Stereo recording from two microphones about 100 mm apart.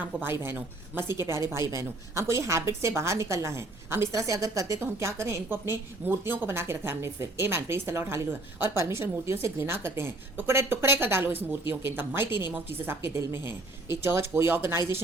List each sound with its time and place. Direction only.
0.2 s a woman's voice: 25° right (ahead or behind)